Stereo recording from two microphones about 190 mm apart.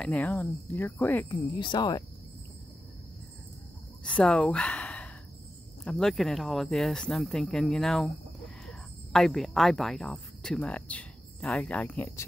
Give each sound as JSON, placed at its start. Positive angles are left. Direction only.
{"t": 0.0, "sound": "speech", "side_deg": 5}
{"t": 1.3, "sound": "speech", "side_deg": 25}
{"t": 4.0, "sound": "a sound", "side_deg": 5}
{"t": 5.9, "sound": "speech", "side_deg": 5}